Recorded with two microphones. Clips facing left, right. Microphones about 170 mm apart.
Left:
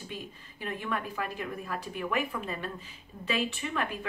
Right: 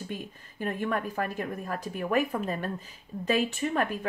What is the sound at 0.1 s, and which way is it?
A woman's voice, 45° right (ahead or behind).